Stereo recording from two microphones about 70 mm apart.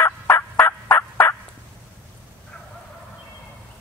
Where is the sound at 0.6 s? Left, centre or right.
Left.